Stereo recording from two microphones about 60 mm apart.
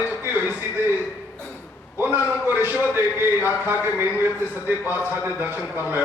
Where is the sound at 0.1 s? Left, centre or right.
Right.